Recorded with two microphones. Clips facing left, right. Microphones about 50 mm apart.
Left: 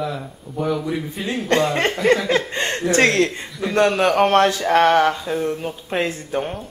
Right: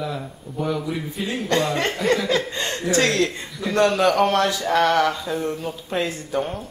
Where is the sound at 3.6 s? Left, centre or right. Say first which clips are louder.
Left 1 dB; left.